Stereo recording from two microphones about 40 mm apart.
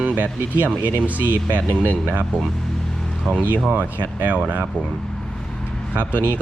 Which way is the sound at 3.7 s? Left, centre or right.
Right.